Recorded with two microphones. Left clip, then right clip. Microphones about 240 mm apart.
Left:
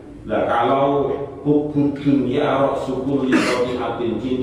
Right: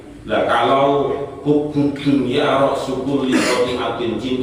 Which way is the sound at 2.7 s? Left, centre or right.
Left.